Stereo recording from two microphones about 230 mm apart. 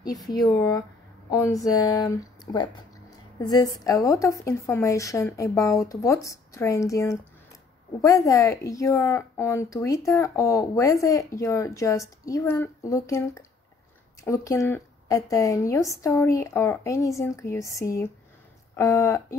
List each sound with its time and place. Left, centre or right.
0.6 s a woman's voice: centre